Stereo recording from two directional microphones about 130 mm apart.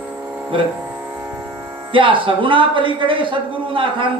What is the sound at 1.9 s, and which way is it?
A man's voice, 40° right (ahead or behind).